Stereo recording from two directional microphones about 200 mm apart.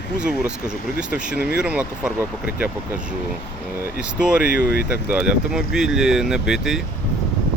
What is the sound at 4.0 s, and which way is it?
Speech, 5° right (ahead or behind).